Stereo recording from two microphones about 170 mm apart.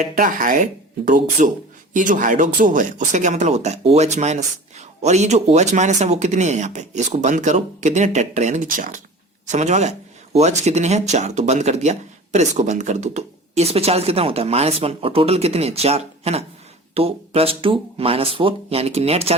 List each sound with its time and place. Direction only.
0.0 s speech: 50° right (ahead or behind)